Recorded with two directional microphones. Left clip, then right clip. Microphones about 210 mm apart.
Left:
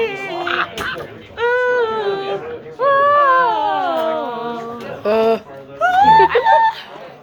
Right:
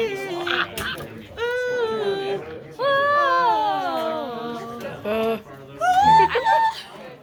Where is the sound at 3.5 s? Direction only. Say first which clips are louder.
Left 4 dB; 40° right (ahead or behind).